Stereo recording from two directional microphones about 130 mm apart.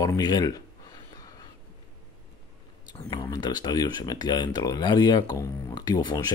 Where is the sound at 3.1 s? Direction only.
35° left (ahead or behind).